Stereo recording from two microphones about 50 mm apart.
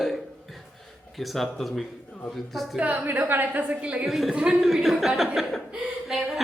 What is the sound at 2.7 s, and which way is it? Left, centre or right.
A woman's voice, right.